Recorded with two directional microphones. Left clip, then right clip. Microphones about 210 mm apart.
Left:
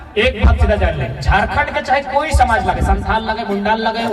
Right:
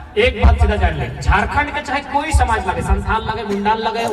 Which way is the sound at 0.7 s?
30° left (ahead or behind).